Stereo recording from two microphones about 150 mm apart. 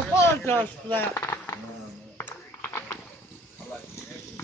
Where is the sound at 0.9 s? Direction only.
15° left (ahead or behind).